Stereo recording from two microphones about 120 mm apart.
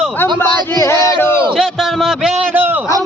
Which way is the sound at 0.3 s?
25° left (ahead or behind).